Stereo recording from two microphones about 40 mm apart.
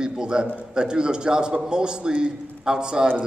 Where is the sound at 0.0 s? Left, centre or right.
Centre.